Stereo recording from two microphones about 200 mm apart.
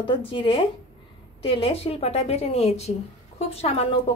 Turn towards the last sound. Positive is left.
turn(degrees=30)  # may be behind; listen again after turning